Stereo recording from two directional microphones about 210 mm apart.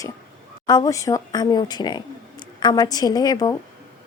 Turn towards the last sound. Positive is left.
turn(degrees=20)  # may be behind; listen again after turning